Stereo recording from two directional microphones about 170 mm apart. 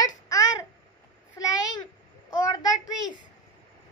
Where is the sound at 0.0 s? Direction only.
20° left (ahead or behind).